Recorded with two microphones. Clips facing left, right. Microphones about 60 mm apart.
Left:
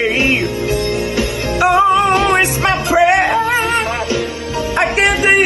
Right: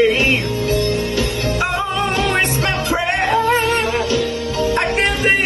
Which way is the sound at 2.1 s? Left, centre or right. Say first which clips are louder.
Left 6 dB; left.